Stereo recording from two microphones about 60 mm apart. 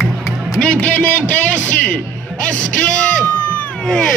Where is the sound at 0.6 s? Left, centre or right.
Centre.